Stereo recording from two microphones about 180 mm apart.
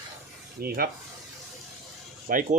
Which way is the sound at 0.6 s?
60° right (ahead or behind).